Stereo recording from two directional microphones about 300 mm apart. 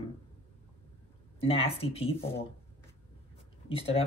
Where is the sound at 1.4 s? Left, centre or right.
Centre.